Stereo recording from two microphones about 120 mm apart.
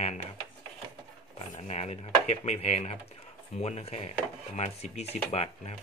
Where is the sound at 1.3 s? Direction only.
65° left (ahead or behind).